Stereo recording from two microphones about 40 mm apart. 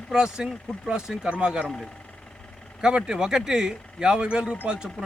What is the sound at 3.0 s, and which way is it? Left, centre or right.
Speech, centre.